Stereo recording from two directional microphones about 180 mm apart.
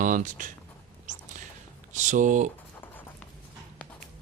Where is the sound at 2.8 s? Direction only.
10° left (ahead or behind).